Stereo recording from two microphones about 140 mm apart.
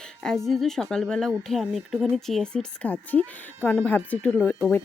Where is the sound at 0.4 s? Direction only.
Centre (ahead or behind).